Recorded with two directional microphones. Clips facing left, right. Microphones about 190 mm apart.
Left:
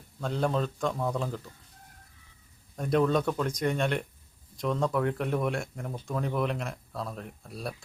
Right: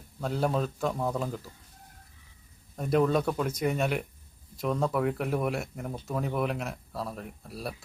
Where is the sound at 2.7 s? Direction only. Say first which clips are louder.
Even; 5° right (ahead or behind).